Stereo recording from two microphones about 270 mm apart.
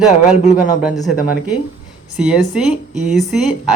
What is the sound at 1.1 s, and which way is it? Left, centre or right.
Speech, left.